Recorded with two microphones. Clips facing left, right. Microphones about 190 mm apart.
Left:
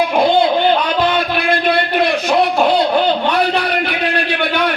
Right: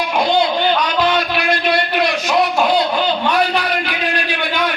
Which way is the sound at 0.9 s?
55° left (ahead or behind).